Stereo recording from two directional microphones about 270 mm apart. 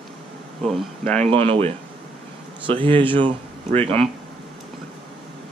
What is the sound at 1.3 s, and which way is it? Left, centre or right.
Speech, right.